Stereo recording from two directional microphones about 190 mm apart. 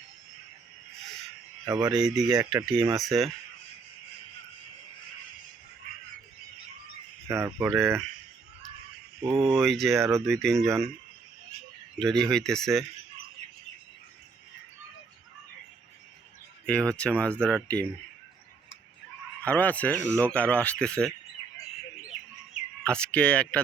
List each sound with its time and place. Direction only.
1.6 s speech: 15° right (ahead or behind)
1.9 s speech: 5° right (ahead or behind)
7.3 s speech: 15° right (ahead or behind)
9.3 s speech: 25° right (ahead or behind)
9.6 s speech: centre (ahead or behind)
10.0 s speech: 15° right (ahead or behind)
10.2 s speech: centre (ahead or behind)
11.9 s speech: 5° left (ahead or behind)
16.6 s speech: 5° left (ahead or behind)
19.5 s speech: 10° left (ahead or behind)
22.9 s speech: 5° left (ahead or behind)